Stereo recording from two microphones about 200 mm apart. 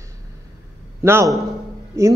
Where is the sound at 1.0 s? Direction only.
10° right (ahead or behind).